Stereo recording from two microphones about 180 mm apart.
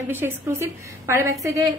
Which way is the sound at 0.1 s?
15° right (ahead or behind).